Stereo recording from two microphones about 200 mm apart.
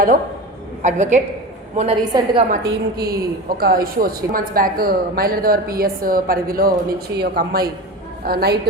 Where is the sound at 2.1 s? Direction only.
25° right (ahead or behind).